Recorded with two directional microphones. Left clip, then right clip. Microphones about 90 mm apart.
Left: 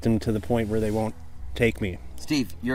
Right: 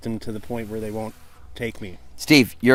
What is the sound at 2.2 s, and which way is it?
Speech, 55° right (ahead or behind).